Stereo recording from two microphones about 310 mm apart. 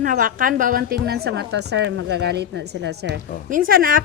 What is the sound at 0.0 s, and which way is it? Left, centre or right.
A woman's voice, right.